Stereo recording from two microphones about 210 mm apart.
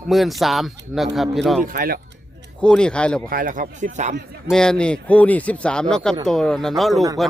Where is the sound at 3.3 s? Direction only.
40° right (ahead or behind).